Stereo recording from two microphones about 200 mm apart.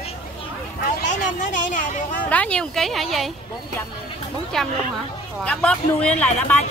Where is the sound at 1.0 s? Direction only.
40° left (ahead or behind).